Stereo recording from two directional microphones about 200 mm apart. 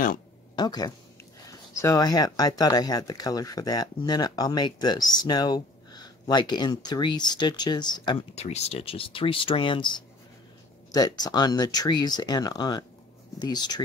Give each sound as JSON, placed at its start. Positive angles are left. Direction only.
{"t": 0.6, "sound": "speech", "side_deg": 20}